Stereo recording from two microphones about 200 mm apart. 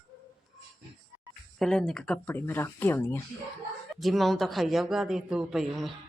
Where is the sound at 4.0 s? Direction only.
Centre (ahead or behind).